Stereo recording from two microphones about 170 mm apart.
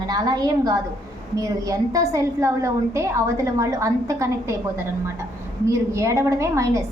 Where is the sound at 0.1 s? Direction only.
25° right (ahead or behind).